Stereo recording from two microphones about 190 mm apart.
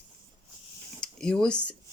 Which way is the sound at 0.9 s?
5° left (ahead or behind).